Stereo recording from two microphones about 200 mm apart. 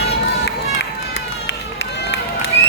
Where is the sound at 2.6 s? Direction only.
60° left (ahead or behind).